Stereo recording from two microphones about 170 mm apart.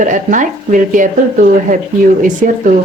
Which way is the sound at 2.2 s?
50° right (ahead or behind).